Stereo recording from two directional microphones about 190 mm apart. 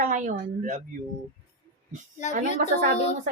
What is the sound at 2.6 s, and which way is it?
Speech, 35° left (ahead or behind).